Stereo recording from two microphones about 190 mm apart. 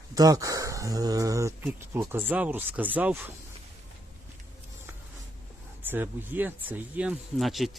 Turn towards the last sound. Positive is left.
turn(degrees=0)  # may be behind; listen again after turning